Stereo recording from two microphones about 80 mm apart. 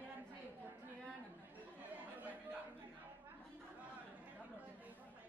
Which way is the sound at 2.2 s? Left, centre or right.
Right.